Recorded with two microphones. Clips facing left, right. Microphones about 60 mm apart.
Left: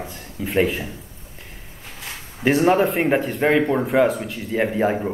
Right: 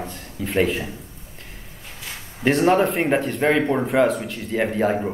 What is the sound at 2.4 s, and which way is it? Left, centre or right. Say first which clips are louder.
Speech: left 1 dB; centre.